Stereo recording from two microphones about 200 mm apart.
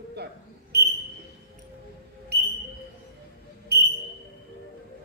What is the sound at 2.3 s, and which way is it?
Whistle, 55° right (ahead or behind).